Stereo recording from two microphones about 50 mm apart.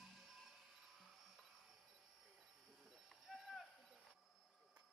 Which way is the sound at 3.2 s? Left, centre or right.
Centre.